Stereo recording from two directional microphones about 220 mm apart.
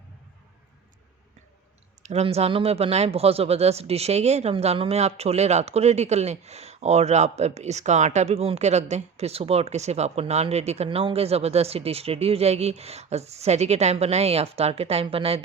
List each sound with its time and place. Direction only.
2.0 s speech: 30° right (ahead or behind)